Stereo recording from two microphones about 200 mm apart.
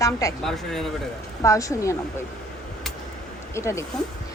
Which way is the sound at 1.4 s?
15° left (ahead or behind).